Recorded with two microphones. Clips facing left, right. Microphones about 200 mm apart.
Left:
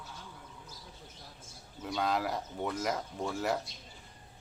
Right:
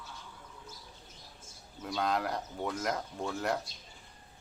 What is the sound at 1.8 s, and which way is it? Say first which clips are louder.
Speech: even; centre (ahead or behind).